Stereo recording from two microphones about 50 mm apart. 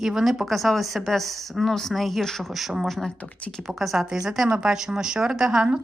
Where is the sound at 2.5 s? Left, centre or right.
Centre.